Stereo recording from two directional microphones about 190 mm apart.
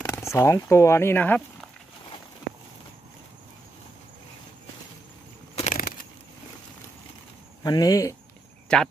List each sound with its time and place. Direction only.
0.0 s speech: 15° left (ahead or behind)
5.6 s crushing: 45° left (ahead or behind)
7.6 s speech: 20° left (ahead or behind)
8.7 s speech: 5° left (ahead or behind)